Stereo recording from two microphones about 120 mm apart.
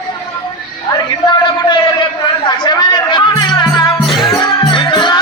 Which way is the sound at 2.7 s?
40° left (ahead or behind).